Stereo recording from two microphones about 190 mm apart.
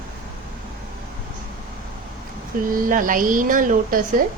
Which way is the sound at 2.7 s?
45° right (ahead or behind).